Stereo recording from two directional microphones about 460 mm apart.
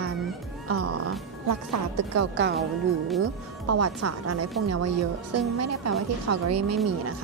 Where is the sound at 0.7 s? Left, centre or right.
Right.